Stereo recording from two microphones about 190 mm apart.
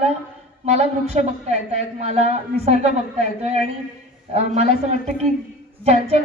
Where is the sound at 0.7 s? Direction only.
35° right (ahead or behind).